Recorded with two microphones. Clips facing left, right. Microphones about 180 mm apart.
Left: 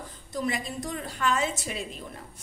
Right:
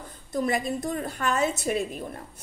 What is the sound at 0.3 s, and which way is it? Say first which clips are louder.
A woman's voice: right 5 dB; 50° right (ahead or behind).